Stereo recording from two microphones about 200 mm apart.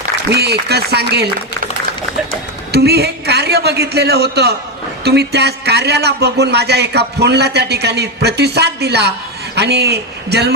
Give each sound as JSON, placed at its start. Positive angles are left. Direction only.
{"t": 0.3, "sound": "a man's voice", "side_deg": -55}
{"t": 2.7, "sound": "a man's voice", "side_deg": -55}